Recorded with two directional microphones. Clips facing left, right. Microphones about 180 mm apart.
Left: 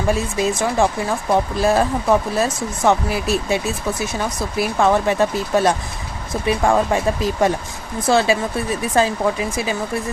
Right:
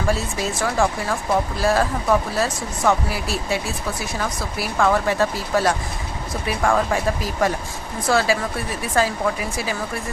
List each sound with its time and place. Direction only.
0.1 s speech: 15° left (ahead or behind)